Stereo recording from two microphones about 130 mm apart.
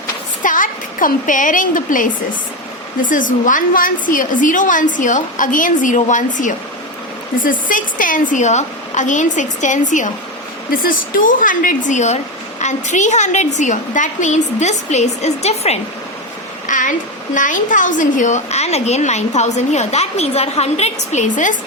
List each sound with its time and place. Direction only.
0.4 s a woman's voice: 90° left
7.3 s a woman's voice: 90° left; by 10.1 s 75° left (ahead or behind)
10.7 s a woman's voice: 90° left; by 15.8 s 55° left (ahead or behind)
16.6 s a sound: 75° left (ahead or behind)
17.3 s a woman's voice: 80° left